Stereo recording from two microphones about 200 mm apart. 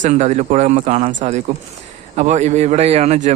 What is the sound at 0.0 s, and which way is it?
A man's voice, 35° right (ahead or behind).